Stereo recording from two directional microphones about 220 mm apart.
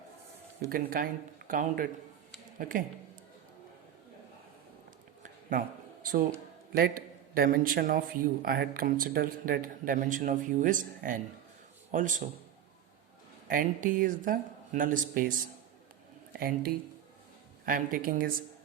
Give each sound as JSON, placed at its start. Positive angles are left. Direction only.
{"t": 0.7, "sound": "a man's voice", "side_deg": -40}
{"t": 5.2, "sound": "a sound", "side_deg": -40}
{"t": 6.7, "sound": "a man's voice", "side_deg": -45}
{"t": 13.5, "sound": "a man's voice", "side_deg": -40}